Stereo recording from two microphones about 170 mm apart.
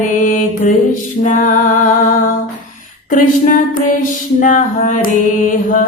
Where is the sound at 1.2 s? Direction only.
50° left (ahead or behind).